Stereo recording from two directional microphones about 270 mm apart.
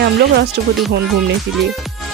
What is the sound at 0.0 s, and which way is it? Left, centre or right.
Speech, right.